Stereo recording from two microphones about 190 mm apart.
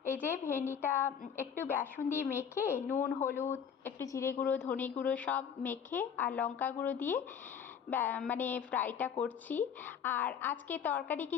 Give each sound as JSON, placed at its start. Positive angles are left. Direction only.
{"t": 0.3, "sound": "speech", "side_deg": 10}